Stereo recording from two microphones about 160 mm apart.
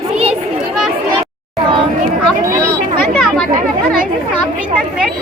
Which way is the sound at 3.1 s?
Centre (ahead or behind).